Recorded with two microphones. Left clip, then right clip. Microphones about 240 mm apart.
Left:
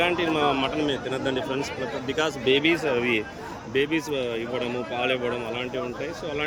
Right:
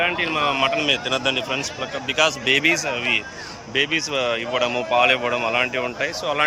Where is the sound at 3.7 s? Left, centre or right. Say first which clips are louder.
Right 4 dB; centre.